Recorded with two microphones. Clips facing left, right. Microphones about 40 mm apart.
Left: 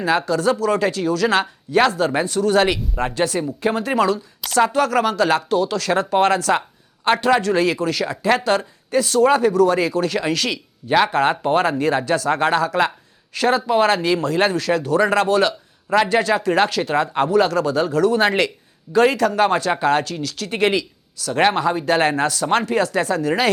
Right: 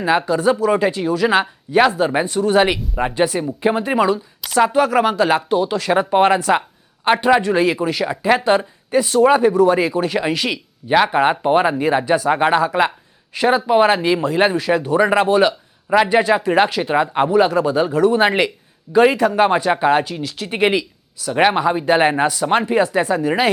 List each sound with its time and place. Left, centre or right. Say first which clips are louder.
0.0 s speech: right 2 dB; centre
2.8 s speech: right 3 dB; centre